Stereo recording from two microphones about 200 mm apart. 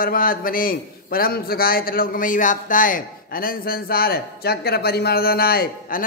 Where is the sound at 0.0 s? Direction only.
45° left (ahead or behind).